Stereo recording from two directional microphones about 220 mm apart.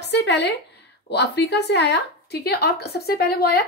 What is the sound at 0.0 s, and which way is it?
A woman's voice, 50° left (ahead or behind).